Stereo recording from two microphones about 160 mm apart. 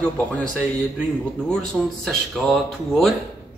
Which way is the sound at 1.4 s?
5° left (ahead or behind).